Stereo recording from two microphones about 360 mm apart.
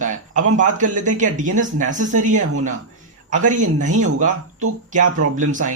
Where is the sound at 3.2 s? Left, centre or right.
Right.